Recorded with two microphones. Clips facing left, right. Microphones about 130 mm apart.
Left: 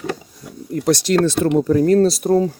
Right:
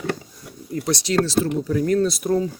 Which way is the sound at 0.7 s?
45° left (ahead or behind).